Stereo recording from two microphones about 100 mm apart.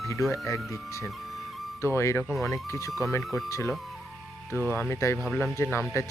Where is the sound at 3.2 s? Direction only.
Centre (ahead or behind).